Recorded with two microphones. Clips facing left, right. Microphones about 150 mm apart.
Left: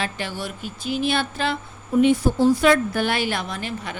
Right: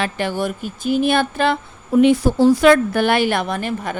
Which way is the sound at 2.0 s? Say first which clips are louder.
Right 4 dB; 80° right.